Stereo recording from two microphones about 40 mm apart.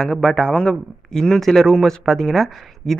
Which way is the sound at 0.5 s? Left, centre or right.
Left.